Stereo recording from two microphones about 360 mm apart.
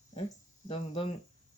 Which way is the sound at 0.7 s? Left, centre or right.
Centre.